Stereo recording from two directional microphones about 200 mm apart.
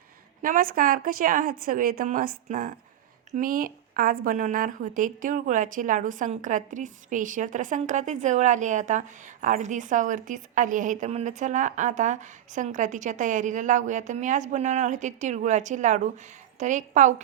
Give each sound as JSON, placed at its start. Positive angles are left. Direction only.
{"t": 0.4, "sound": "a woman's voice", "side_deg": -45}